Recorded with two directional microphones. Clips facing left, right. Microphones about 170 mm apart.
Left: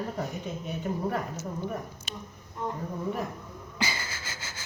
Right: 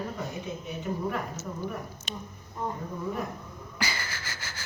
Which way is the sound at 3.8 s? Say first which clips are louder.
Left 1 dB; 20° left (ahead or behind).